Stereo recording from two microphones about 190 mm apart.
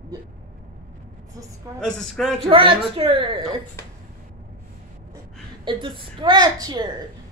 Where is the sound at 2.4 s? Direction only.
25° right (ahead or behind).